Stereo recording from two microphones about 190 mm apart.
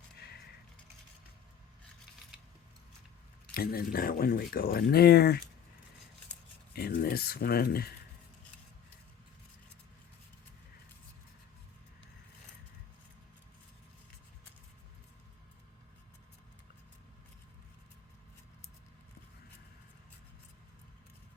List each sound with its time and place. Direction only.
0.2 s a sound: 55° left (ahead or behind)
3.5 s speech: 50° left (ahead or behind)
6.7 s speech: 55° left (ahead or behind)